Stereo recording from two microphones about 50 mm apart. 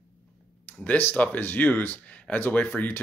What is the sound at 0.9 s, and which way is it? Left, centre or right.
Speech, left.